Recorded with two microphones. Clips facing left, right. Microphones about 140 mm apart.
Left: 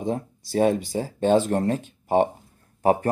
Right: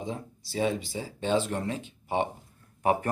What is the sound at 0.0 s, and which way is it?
Speech, 50° left (ahead or behind).